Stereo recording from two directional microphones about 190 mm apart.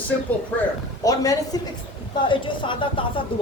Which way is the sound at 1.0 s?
20° left (ahead or behind).